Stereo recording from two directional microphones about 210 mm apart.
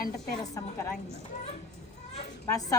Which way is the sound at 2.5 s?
15° left (ahead or behind).